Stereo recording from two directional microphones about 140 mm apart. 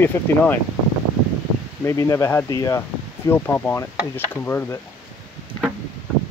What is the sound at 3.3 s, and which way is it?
Speech, 15° left (ahead or behind).